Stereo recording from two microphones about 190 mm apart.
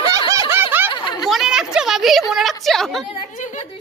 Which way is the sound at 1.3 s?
Centre (ahead or behind).